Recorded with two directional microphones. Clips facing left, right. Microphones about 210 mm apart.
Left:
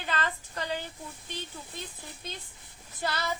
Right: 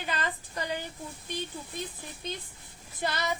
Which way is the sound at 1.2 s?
15° right (ahead or behind).